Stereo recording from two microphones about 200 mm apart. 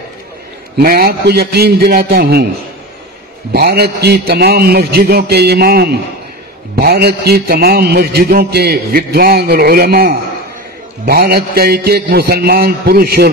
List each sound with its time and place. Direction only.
0.7 s a man's voice: 50° right (ahead or behind)
3.5 s a man's voice: 50° right (ahead or behind)